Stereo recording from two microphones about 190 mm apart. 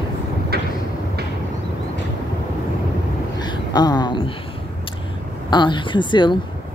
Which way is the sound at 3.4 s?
20° left (ahead or behind).